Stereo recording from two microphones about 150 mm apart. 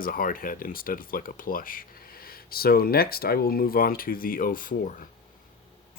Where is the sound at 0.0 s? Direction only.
70° left (ahead or behind).